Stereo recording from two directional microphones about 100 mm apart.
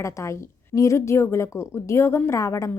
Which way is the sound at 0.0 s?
30° left (ahead or behind).